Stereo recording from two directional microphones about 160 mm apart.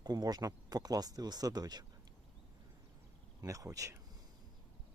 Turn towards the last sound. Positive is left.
turn(degrees=-20)  # may be behind; listen again after turning